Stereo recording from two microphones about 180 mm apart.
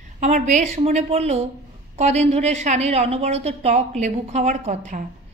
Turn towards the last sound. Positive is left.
turn(degrees=-40)  # may be behind; listen again after turning